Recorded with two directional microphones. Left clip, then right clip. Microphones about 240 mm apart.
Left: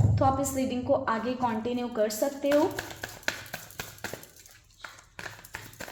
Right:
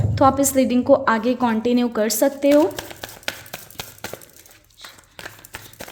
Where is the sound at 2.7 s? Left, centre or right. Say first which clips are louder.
Right 4 dB; right.